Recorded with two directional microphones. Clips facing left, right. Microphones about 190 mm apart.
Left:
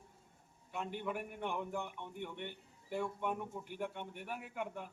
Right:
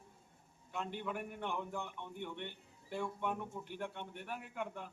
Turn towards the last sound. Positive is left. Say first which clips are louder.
# left 1 dB
turn(degrees=10)  # may be behind; listen again after turning